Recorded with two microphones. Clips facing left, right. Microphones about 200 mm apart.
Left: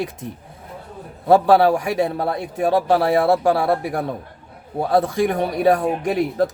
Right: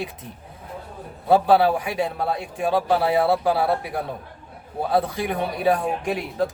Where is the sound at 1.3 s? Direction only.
45° left (ahead or behind).